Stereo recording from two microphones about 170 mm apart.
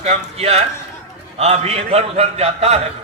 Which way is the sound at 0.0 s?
40° right (ahead or behind).